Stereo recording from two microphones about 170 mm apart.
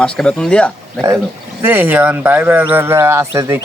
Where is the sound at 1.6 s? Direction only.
10° right (ahead or behind).